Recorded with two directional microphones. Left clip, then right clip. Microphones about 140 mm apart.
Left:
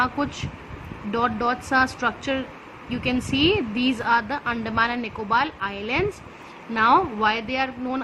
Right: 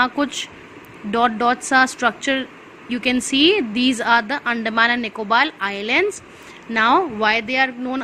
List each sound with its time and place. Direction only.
0.0 s a woman's voice: 35° right (ahead or behind)